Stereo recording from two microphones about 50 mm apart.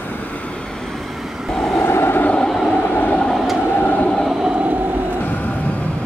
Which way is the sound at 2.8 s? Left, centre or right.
Left.